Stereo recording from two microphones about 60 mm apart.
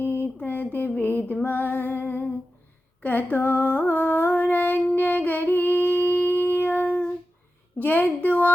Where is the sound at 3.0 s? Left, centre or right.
Left.